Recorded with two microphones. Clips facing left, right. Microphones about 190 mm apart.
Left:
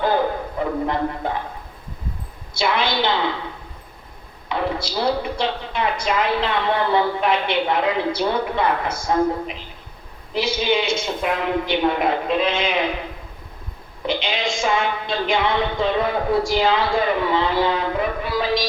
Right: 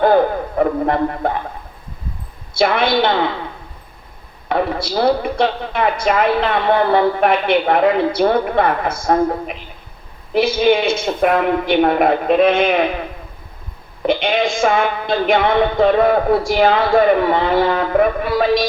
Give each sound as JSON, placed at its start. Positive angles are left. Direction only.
{"t": 0.0, "sound": "speech", "side_deg": -55}
{"t": 2.6, "sound": "a woman's voice", "side_deg": -55}
{"t": 4.4, "sound": "a woman's voice", "side_deg": -55}
{"t": 14.0, "sound": "a woman's voice", "side_deg": -55}